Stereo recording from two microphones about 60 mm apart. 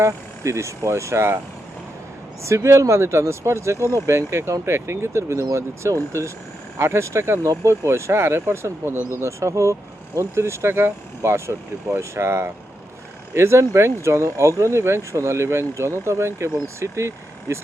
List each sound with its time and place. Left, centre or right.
0.0 s speech: right
2.4 s speech: right
9.1 s speech: right